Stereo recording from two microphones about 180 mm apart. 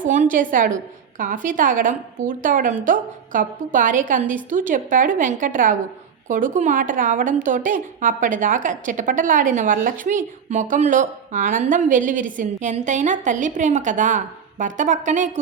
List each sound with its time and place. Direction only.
0.0 s a woman's voice: 45° right (ahead or behind)